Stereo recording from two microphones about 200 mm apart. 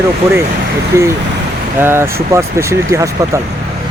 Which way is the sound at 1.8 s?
10° right (ahead or behind).